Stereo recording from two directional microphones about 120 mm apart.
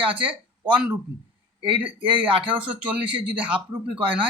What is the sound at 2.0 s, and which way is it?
Speech, 45° right (ahead or behind).